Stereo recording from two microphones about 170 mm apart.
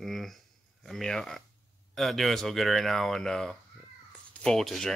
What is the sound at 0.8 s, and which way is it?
Speech, centre (ahead or behind).